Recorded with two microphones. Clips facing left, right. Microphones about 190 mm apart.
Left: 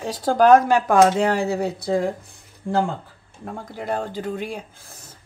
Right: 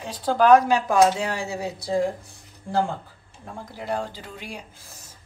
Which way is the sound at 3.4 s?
55° left (ahead or behind).